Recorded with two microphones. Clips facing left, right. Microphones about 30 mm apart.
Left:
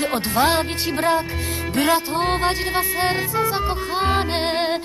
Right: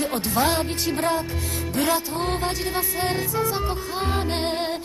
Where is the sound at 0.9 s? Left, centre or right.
Left.